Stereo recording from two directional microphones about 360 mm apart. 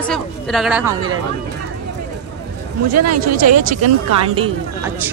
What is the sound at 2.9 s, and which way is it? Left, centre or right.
Speech, right.